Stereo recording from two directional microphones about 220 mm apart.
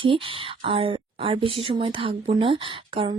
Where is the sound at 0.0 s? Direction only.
25° right (ahead or behind).